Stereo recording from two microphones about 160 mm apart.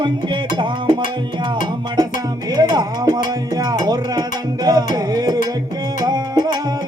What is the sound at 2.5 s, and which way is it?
Music, 25° right (ahead or behind).